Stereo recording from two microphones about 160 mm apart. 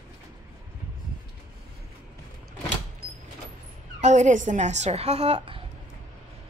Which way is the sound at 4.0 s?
50° right (ahead or behind).